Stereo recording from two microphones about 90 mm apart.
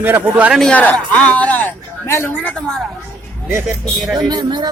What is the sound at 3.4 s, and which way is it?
Speech, 30° right (ahead or behind).